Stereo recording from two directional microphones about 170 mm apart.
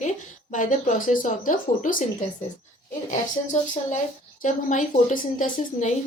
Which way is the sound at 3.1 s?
45° left (ahead or behind).